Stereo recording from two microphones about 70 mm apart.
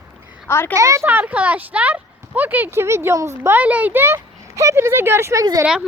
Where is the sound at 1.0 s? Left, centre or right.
Right.